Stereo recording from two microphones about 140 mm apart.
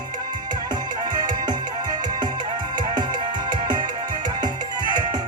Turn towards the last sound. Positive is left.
turn(degrees=-30)  # may be behind; listen again after turning